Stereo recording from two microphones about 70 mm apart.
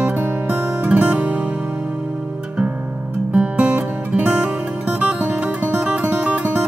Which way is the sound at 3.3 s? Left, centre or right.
Centre.